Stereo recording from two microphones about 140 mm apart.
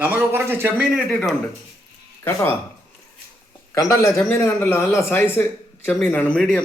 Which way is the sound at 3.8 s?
60° left (ahead or behind).